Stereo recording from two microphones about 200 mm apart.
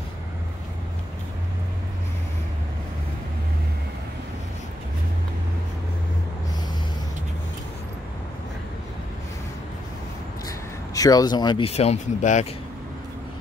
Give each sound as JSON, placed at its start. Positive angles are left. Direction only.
{"t": 11.0, "sound": "speech", "side_deg": 20}